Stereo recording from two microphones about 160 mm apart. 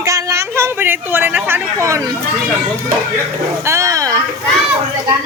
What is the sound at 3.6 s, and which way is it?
Speech, 20° right (ahead or behind).